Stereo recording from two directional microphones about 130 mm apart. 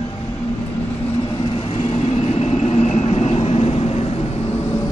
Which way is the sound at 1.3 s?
40° left (ahead or behind).